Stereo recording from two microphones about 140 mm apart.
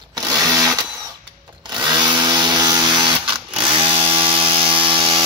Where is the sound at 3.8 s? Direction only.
40° right (ahead or behind).